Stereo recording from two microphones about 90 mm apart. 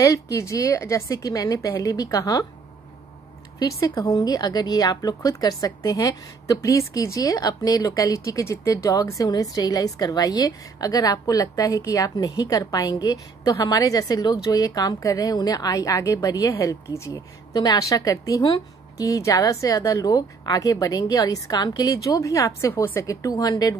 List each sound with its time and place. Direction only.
0.0 s a woman's voice: 35° left (ahead or behind)
3.5 s a woman's voice: 40° left (ahead or behind)
17.1 s a woman's voice: 45° left (ahead or behind)